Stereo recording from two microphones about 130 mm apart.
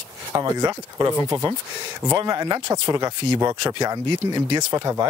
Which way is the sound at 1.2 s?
30° right (ahead or behind).